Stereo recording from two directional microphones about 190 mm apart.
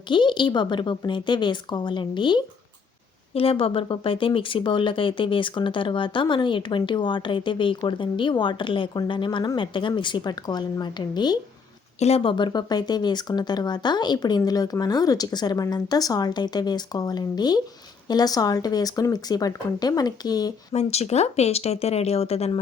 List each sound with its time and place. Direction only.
0.1 s speech: 25° left (ahead or behind)
11.9 s speech: 35° left (ahead or behind)
20.7 s speech: 35° left (ahead or behind)